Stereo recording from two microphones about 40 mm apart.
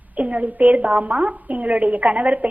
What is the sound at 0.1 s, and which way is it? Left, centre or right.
A woman's voice, right.